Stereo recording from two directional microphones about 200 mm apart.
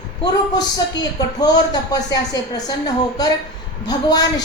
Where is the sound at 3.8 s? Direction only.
20° left (ahead or behind).